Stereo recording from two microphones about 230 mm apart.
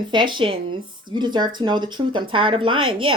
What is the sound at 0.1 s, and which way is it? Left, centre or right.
Speech, centre.